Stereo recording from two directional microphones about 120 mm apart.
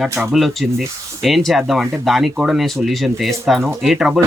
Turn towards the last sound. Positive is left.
turn(degrees=-5)  # may be behind; listen again after turning